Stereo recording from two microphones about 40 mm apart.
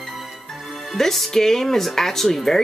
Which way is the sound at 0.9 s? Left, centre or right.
Centre.